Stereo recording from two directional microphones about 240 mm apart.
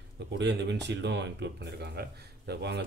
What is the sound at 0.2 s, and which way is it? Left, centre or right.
Speech, right.